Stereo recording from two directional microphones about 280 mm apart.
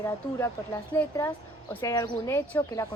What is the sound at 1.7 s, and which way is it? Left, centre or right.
Speech, centre.